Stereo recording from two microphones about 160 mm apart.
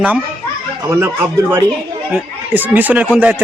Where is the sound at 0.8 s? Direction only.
15° right (ahead or behind).